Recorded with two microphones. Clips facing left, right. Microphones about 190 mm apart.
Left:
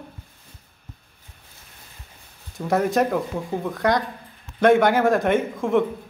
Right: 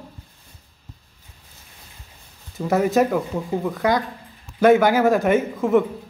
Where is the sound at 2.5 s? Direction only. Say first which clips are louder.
Right 2 dB; 5° right (ahead or behind).